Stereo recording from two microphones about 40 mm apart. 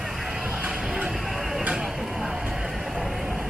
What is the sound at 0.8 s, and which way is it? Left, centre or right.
Music, centre.